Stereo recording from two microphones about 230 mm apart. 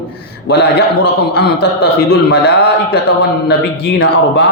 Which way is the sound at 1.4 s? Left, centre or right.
Left.